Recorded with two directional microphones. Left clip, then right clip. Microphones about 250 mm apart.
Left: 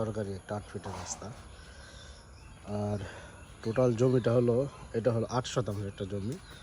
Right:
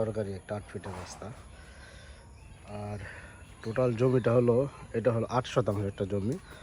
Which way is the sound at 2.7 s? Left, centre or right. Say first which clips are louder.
Left 4 dB; centre.